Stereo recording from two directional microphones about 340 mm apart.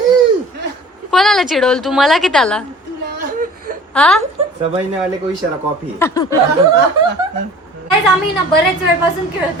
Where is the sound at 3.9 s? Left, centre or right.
Centre.